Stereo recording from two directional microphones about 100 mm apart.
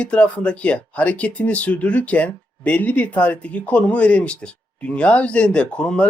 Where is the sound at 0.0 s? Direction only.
10° left (ahead or behind).